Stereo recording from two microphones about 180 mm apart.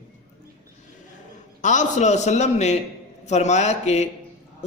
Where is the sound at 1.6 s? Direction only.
45° left (ahead or behind).